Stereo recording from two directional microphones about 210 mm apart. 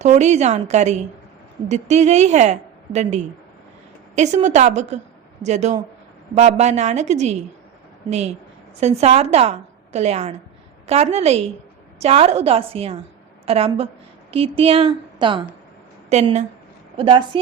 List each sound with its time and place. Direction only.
0.0 s a woman's voice: 35° right (ahead or behind)
8.8 s a woman's voice: 30° right (ahead or behind)